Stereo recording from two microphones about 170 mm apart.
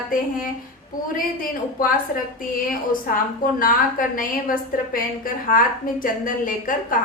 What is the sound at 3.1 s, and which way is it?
Speech, 55° left (ahead or behind).